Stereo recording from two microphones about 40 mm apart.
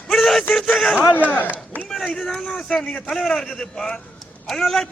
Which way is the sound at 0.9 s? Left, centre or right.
Left.